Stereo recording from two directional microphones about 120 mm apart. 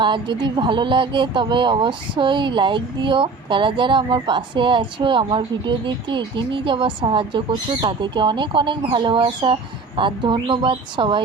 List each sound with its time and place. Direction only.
0.0 s speech: 40° right (ahead or behind)